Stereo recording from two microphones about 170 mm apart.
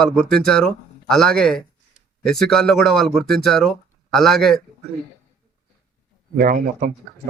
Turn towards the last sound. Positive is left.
turn(degrees=-55)  # may be behind; listen again after turning